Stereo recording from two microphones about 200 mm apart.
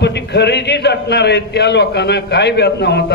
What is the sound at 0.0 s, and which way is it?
A man's voice, 55° left (ahead or behind).